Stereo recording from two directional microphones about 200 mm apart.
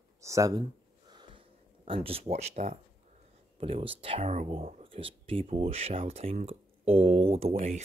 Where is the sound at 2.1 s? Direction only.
30° right (ahead or behind).